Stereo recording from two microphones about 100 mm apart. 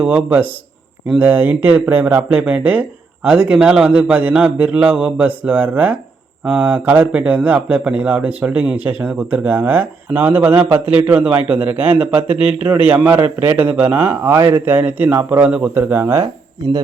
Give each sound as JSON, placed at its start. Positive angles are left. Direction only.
{"t": 0.0, "sound": "speech", "side_deg": -15}